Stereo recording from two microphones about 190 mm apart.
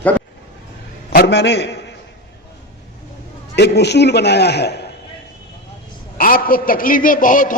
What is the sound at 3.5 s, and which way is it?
A man's voice, 60° left (ahead or behind).